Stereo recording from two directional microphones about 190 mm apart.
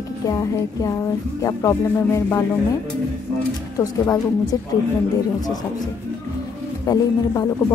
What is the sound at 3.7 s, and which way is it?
Speech, 20° left (ahead or behind).